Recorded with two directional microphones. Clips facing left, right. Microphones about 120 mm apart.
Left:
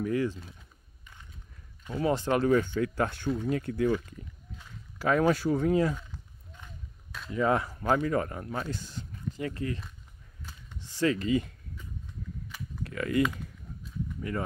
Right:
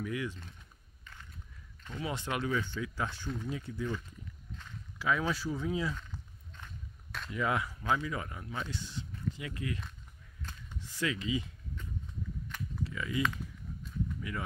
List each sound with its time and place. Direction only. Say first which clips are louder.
0.0 s speech: left 8 dB; 40° left (ahead or behind)
2.0 s speech: left 9 dB; 40° left (ahead or behind); by 4.0 s 75° left (ahead or behind)
4.9 s speech: left 7 dB; 50° left (ahead or behind)
7.2 s speech: left 6 dB; 35° left (ahead or behind)
10.8 s speech: left 8 dB; 30° left (ahead or behind); by 11.5 s 50° left (ahead or behind)
12.8 s typing: left 7 dB; 55° left (ahead or behind)